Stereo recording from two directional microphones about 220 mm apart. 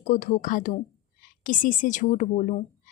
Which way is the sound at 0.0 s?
35° left (ahead or behind).